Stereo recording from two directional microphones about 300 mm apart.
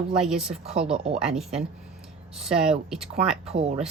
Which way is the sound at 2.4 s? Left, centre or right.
Centre.